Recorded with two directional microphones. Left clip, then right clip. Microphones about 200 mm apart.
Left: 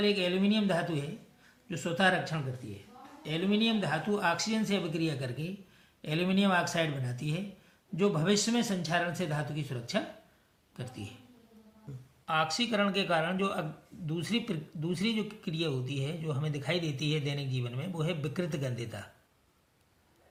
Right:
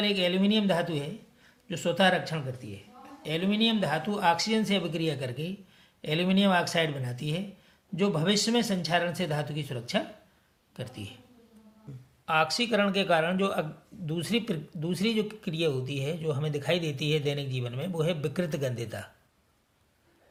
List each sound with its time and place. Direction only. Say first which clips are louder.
0.0 s speech: right 2 dB; 40° right (ahead or behind)
12.2 s speech: right 4 dB; 40° right (ahead or behind)